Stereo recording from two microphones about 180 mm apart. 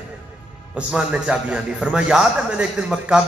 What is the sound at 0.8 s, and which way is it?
A man's voice, 5° right (ahead or behind).